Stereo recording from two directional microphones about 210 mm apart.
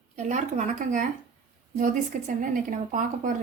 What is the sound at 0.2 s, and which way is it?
Speech, 35° right (ahead or behind).